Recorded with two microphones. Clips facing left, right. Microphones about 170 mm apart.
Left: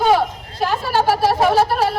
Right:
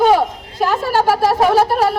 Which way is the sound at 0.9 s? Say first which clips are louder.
Right 1 dB; 45° right (ahead or behind).